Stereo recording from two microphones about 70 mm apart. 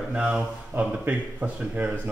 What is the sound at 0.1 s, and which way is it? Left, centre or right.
Speech, centre.